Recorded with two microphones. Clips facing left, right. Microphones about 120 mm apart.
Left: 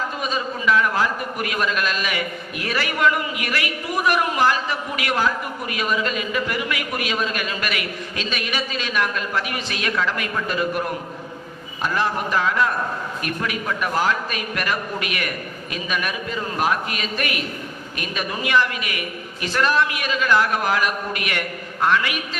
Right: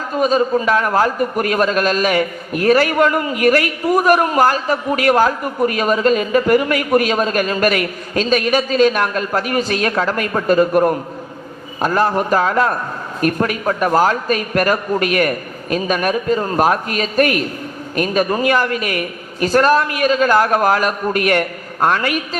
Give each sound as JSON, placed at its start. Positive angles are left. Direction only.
{"t": 0.2, "sound": "a man's voice", "side_deg": -40}